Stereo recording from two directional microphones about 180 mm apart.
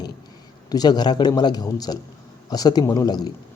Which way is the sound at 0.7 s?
20° left (ahead or behind).